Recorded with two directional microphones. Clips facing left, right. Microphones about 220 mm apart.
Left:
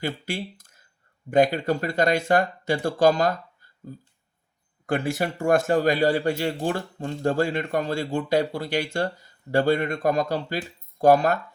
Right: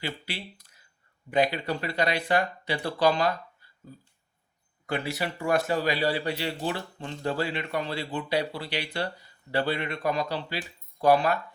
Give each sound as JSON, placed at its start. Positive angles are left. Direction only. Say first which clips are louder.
{"t": 0.0, "sound": "a man's voice", "louder": "left 6 dB", "side_deg": 45}